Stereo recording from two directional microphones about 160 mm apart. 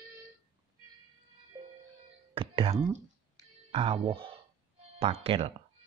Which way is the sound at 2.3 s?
35° right (ahead or behind).